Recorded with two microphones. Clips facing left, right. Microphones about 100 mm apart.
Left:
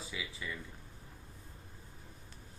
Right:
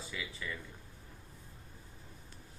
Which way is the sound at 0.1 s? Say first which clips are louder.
Even; 5° left (ahead or behind).